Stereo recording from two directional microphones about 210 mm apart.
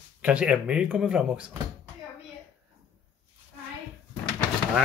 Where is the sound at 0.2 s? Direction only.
5° right (ahead or behind).